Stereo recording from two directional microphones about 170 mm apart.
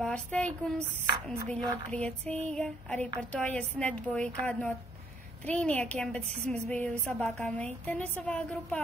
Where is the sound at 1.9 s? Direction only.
10° left (ahead or behind).